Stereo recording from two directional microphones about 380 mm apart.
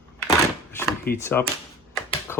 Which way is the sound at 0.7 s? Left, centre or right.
Centre.